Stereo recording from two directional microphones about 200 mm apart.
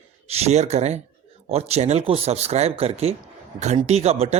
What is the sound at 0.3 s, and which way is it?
Speech, 30° right (ahead or behind).